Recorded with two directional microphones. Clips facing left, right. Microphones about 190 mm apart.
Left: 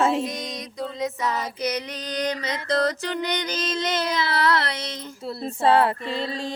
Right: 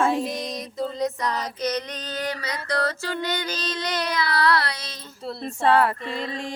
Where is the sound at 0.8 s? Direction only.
Centre (ahead or behind).